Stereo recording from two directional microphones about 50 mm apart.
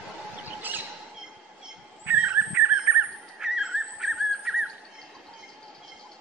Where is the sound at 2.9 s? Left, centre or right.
Right.